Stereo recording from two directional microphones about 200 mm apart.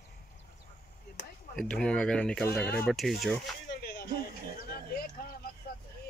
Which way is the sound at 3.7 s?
55° left (ahead or behind).